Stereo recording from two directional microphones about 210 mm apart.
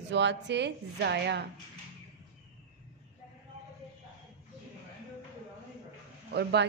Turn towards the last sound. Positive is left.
turn(degrees=-55)  # may be behind; listen again after turning